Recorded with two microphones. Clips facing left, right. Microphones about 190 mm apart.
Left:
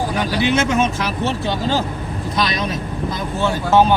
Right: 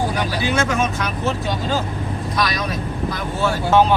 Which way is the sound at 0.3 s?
25° left (ahead or behind).